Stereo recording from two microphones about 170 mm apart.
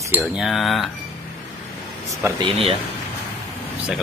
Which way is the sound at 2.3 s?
30° right (ahead or behind).